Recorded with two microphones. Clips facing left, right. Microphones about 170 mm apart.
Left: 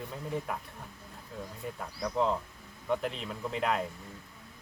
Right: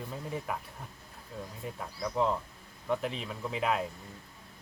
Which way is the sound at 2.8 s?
Centre (ahead or behind).